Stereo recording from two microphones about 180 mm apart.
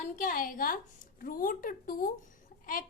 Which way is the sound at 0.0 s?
50° left (ahead or behind).